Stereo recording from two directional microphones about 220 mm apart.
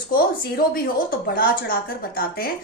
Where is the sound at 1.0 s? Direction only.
40° left (ahead or behind).